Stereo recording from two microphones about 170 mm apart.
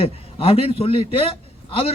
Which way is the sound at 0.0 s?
35° left (ahead or behind).